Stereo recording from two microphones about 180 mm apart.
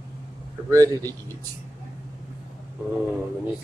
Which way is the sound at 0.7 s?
20° right (ahead or behind).